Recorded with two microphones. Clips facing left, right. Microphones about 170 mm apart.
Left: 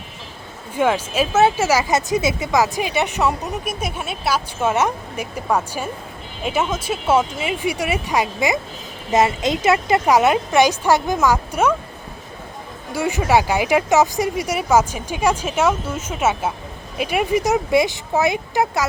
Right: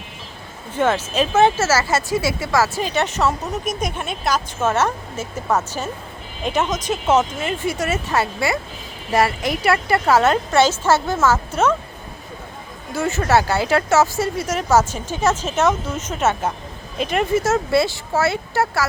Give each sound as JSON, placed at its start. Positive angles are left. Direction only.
{"t": 0.7, "sound": "speech", "side_deg": 10}
{"t": 12.9, "sound": "speech", "side_deg": 10}